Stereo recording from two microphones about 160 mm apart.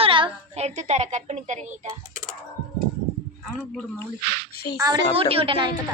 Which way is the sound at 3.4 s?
5° left (ahead or behind).